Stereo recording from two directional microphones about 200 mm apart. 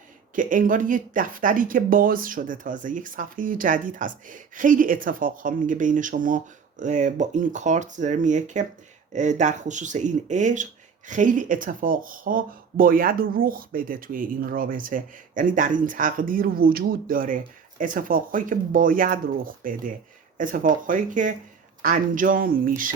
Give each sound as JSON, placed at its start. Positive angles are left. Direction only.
{"t": 0.3, "sound": "speech", "side_deg": -40}